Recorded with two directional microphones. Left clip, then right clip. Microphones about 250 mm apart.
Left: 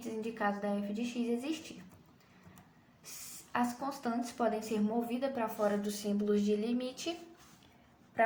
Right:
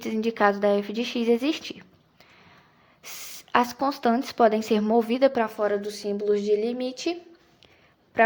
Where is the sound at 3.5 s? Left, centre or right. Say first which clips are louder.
Right 12 dB; right.